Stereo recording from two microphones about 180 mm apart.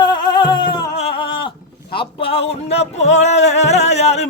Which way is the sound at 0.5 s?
25° left (ahead or behind).